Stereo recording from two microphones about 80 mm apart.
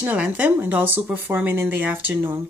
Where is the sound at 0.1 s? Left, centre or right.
Centre.